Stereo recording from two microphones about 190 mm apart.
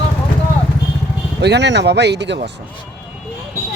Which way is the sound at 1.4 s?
65° right (ahead or behind).